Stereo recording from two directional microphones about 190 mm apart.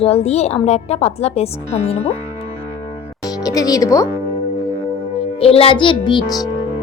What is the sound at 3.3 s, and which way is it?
Speech, 20° left (ahead or behind).